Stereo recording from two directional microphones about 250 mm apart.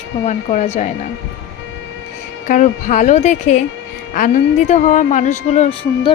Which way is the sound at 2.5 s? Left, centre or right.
Left.